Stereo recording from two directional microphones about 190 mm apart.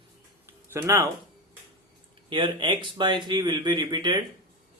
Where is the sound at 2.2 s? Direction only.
25° right (ahead or behind).